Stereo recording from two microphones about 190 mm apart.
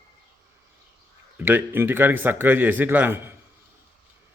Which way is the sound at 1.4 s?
10° right (ahead or behind).